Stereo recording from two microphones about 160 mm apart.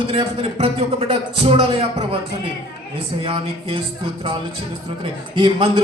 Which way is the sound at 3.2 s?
35° right (ahead or behind).